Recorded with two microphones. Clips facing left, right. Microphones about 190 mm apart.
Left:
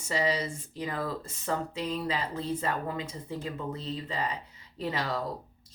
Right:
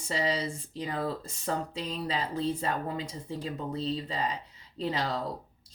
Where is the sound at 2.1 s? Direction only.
30° right (ahead or behind).